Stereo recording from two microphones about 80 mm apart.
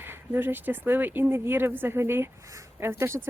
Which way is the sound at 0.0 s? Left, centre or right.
Right.